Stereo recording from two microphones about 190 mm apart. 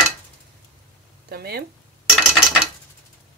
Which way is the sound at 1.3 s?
55° right (ahead or behind).